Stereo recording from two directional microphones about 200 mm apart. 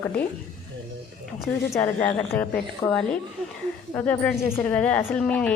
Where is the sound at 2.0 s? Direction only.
5° left (ahead or behind).